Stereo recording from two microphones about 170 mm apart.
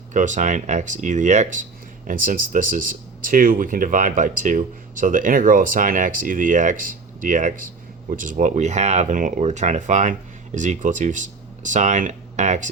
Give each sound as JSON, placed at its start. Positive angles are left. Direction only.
{"t": 0.1, "sound": "speech", "side_deg": -45}